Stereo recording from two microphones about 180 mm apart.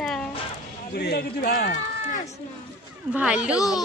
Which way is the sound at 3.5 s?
20° left (ahead or behind).